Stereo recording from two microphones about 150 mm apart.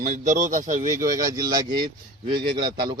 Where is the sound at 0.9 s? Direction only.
20° right (ahead or behind).